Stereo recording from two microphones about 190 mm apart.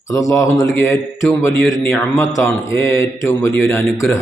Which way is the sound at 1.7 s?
15° left (ahead or behind).